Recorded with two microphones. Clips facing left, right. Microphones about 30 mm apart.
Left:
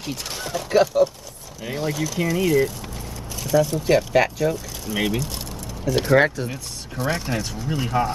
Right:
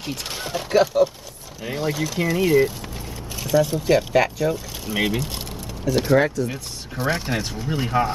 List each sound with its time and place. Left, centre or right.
0.0 s speech: centre
0.7 s speech: centre
3.8 s speech: centre
4.8 s speech: centre
5.9 s speech: centre
6.2 s speech: left
6.5 s speech: centre